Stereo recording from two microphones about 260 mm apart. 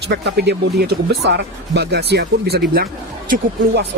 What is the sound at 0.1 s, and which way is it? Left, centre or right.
Speech, right.